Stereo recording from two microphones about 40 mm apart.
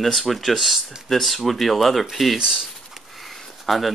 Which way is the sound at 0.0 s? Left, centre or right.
Centre.